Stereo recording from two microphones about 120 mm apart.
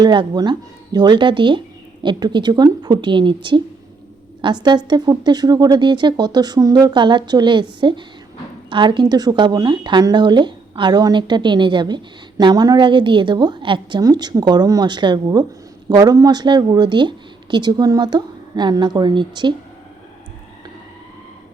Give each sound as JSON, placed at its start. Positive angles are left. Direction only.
{"t": 0.0, "sound": "speech", "side_deg": -40}